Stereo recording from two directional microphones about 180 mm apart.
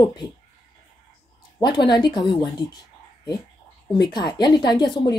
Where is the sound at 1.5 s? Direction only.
25° left (ahead or behind).